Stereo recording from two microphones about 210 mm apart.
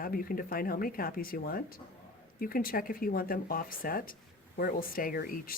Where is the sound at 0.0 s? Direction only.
45° left (ahead or behind).